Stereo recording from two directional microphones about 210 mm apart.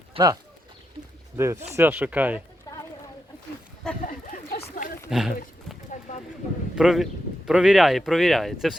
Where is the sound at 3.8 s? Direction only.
5° left (ahead or behind).